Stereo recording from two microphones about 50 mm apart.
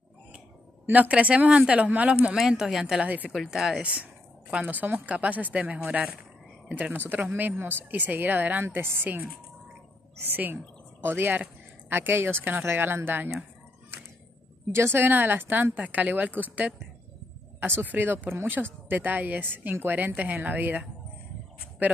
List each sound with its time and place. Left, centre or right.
0.9 s speech: right
2.3 s speech: centre
3.0 s speech: right
3.3 s speech: centre
3.8 s speech: right
6.7 s a woman's voice: right
12.4 s speech: right
14.7 s speech: right
15.9 s speech: right
20.4 s speech: right